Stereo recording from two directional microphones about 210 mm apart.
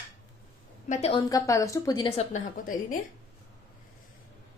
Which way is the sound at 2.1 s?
35° left (ahead or behind).